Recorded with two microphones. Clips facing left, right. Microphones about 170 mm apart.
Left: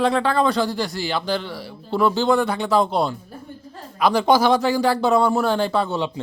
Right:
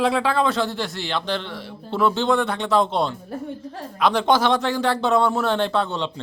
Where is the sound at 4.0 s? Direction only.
Centre (ahead or behind).